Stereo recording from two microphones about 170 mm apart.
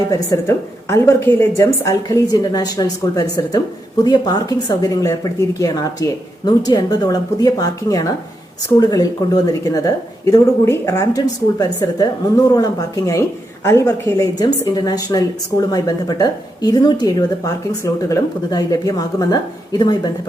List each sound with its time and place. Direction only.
0.1 s speech: 15° left (ahead or behind)